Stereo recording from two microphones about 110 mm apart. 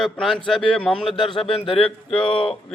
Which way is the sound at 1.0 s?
50° left (ahead or behind).